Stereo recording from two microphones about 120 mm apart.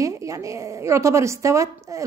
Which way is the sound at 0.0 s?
25° right (ahead or behind).